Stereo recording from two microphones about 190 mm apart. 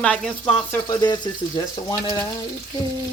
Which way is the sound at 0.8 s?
20° left (ahead or behind).